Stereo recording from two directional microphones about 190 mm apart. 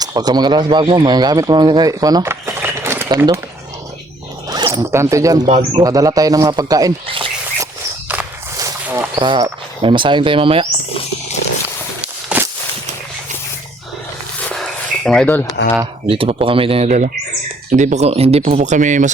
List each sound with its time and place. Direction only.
0.0 s speech: 20° right (ahead or behind)
4.4 s speech: 20° right (ahead or behind)
5.5 s speech: 35° right (ahead or behind)
5.8 s speech: 20° right (ahead or behind)
7.6 s walk: 10° right (ahead or behind); by 10.7 s 30° right (ahead or behind)
12.0 s a sound: 10° right (ahead or behind)
14.5 s a sound: centre (ahead or behind)
16.0 s speech: 30° right (ahead or behind)